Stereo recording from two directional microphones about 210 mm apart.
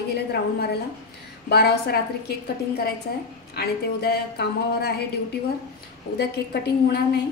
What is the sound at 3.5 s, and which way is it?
A woman's voice, 50° left (ahead or behind).